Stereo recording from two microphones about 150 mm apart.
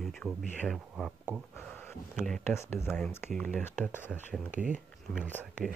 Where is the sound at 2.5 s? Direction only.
15° left (ahead or behind).